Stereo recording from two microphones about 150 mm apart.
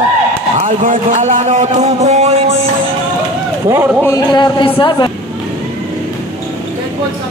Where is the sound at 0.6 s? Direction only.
55° right (ahead or behind).